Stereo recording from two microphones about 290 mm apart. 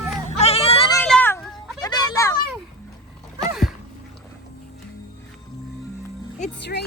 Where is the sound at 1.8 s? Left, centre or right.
Centre.